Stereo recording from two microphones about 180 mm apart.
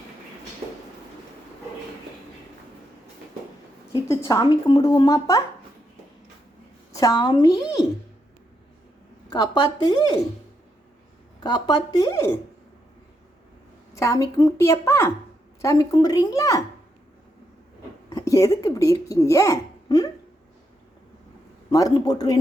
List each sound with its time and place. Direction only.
3.9 s speech: 15° left (ahead or behind)
6.9 s speech: 20° left (ahead or behind)
9.3 s speech: 20° left (ahead or behind)
11.3 s speech: 25° left (ahead or behind)
13.9 s a woman's voice: 15° left (ahead or behind)
18.1 s speech: 20° left (ahead or behind)
21.7 s speech: 20° left (ahead or behind)